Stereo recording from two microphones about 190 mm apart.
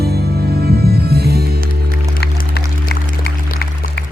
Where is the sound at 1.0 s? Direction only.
55° right (ahead or behind).